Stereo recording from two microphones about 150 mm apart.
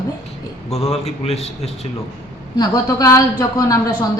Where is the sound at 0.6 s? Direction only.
45° left (ahead or behind).